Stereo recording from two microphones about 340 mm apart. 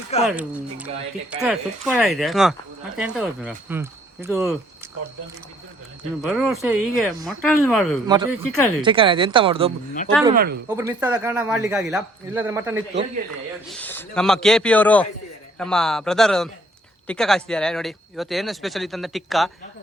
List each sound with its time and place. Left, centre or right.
0.1 s speech: centre
1.4 s speech: centre
6.2 s speech: centre
8.0 s speech: centre
8.4 s speech: left
8.8 s speech: centre
10.3 s speech: right
10.7 s speech: centre
13.7 s speech: centre